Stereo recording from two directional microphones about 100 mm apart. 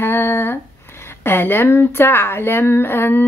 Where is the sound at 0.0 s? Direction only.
20° left (ahead or behind).